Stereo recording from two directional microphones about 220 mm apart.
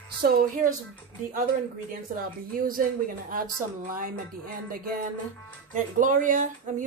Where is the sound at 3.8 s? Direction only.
40° right (ahead or behind).